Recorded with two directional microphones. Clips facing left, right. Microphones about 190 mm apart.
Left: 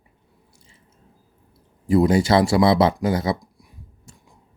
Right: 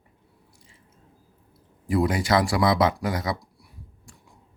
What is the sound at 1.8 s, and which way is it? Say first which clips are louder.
Speech: left 6 dB; 25° left (ahead or behind).